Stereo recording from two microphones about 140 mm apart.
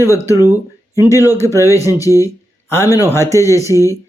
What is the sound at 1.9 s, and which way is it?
Speech, 25° left (ahead or behind).